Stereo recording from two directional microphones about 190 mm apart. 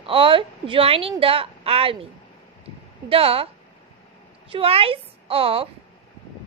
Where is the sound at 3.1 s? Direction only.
30° right (ahead or behind).